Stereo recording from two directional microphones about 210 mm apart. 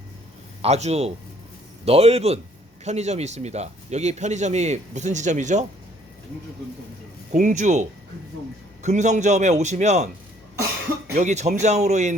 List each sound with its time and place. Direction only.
0.6 s speech: 30° right (ahead or behind)
7.3 s speech: 35° right (ahead or behind)
11.1 s speech: 35° right (ahead or behind)